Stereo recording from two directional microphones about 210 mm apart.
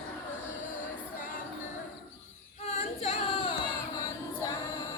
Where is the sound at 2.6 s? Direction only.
30° left (ahead or behind).